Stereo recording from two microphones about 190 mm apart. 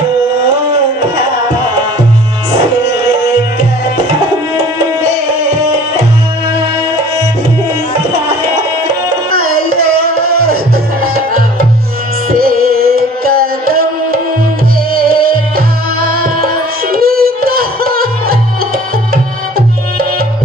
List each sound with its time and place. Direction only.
11.0 s music: 50° right (ahead or behind)